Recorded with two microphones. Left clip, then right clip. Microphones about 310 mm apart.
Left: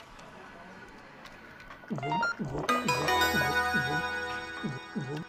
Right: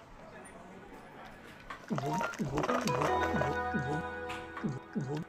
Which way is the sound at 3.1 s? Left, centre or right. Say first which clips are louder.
Left 5 dB; left.